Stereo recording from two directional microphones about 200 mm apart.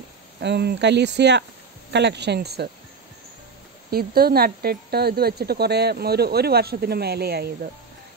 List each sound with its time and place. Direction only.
0.4 s speech: 55° right (ahead or behind)
3.9 s speech: 50° right (ahead or behind)